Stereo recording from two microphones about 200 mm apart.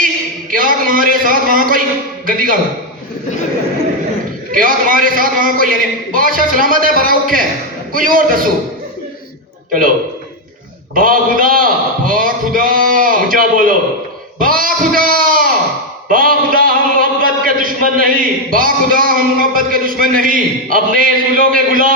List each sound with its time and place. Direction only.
0.5 s a sound: 45° right (ahead or behind)
2.2 s a man's voice: 45° right (ahead or behind)
4.5 s a man's voice: 45° right (ahead or behind)
10.9 s a man's voice: 45° right (ahead or behind)